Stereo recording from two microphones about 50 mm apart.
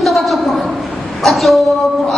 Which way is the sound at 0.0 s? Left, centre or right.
Centre.